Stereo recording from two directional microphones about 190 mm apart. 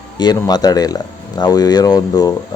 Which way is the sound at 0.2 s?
20° left (ahead or behind).